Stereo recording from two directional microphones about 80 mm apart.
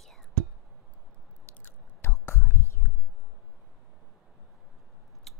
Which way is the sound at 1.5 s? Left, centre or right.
Left.